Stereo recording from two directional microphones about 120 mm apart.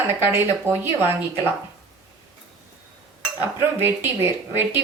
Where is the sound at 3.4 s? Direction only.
20° right (ahead or behind).